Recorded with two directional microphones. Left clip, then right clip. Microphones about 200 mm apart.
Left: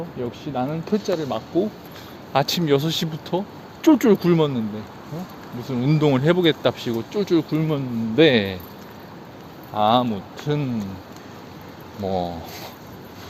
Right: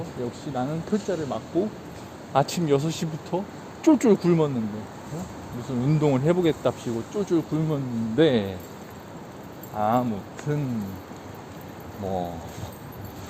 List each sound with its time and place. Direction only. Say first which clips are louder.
0.2 s speech: left 3 dB; 15° left (ahead or behind)
5.6 s speech: left 4 dB; 15° left (ahead or behind)
9.7 s speech: left 5 dB; 20° left (ahead or behind)
12.0 s speech: left 5 dB; 20° left (ahead or behind)